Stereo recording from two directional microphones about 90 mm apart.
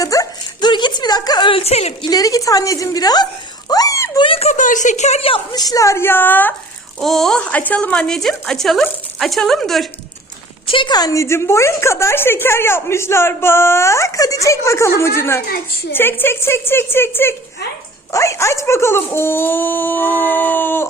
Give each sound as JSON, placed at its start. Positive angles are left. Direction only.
{"t": 0.0, "sound": "dog", "side_deg": 40}
{"t": 0.7, "sound": "a sound", "side_deg": 55}
{"t": 1.5, "sound": "a woman's voice", "side_deg": 80}
{"t": 2.0, "sound": "a woman's voice", "side_deg": 40}
{"t": 3.7, "sound": "a sound", "side_deg": 40}
{"t": 4.2, "sound": "speech", "side_deg": 90}
{"t": 5.5, "sound": "speech", "side_deg": 45}
{"t": 7.0, "sound": "a woman's voice", "side_deg": 5}
{"t": 7.4, "sound": "speech", "side_deg": 15}
{"t": 10.7, "sound": "a woman's voice", "side_deg": 70}
{"t": 10.9, "sound": "a woman's voice", "side_deg": 40}
{"t": 18.1, "sound": "speech", "side_deg": 35}